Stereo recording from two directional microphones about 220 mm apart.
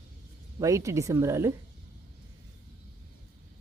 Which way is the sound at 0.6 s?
15° right (ahead or behind).